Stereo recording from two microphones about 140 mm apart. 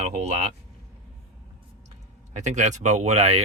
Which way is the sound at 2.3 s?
55° right (ahead or behind).